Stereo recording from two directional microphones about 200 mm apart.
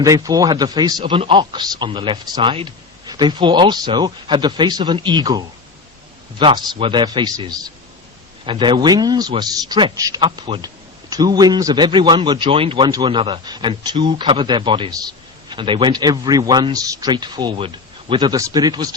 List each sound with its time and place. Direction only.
0.0 s a man's voice: 20° right (ahead or behind)